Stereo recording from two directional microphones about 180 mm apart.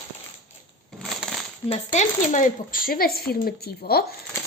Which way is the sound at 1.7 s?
40° left (ahead or behind).